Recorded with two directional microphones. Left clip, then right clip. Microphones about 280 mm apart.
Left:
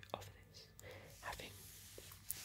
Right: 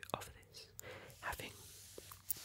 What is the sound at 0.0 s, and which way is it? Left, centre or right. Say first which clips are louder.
Whispering: right 5 dB; right.